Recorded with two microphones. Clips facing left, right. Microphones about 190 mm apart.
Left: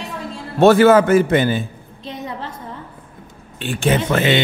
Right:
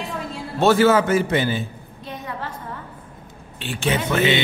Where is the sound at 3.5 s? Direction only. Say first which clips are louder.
Left 5 dB; 50° left (ahead or behind).